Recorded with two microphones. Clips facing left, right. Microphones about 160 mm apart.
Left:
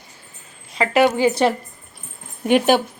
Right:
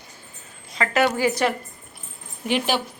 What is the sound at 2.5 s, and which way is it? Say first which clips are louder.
Speech: left 8 dB; 50° left (ahead or behind).